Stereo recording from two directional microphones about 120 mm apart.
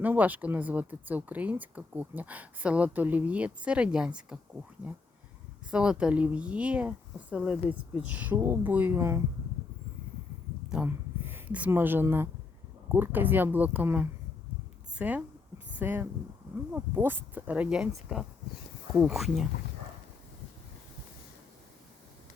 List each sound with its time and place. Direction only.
0.0 s speech: 15° right (ahead or behind)
5.7 s speech: 5° right (ahead or behind)
10.7 s a woman's voice: 15° right (ahead or behind)
14.9 s a sound: 15° right (ahead or behind)
16.7 s speech: 15° right (ahead or behind); by 19.5 s centre (ahead or behind)